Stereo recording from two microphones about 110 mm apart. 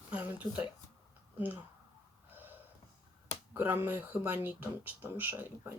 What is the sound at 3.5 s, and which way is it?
Speech, 20° right (ahead or behind).